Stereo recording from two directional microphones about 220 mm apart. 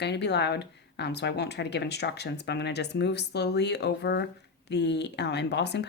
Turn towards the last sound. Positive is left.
turn(degrees=50)  # may be behind; listen again after turning